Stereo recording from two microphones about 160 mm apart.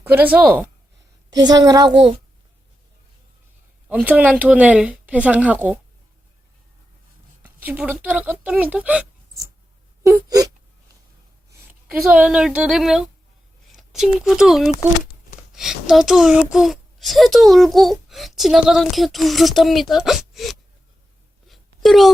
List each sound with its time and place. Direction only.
0.0 s speech: 10° right (ahead or behind)
1.3 s a woman's voice: 25° right (ahead or behind)
3.8 s speech: 10° right (ahead or behind)
7.4 s speech: 10° right (ahead or behind)
10.0 s a sound: 20° right (ahead or behind)
12.1 s a child's voice: 10° right (ahead or behind)
21.4 s a sound: centre (ahead or behind)